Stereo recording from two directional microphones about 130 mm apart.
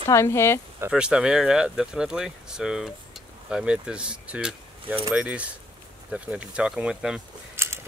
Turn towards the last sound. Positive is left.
turn(degrees=-20)  # may be behind; listen again after turning